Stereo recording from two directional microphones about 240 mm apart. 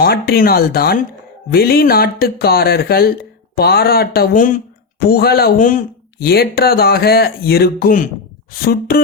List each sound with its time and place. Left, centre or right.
0.0 s speech: left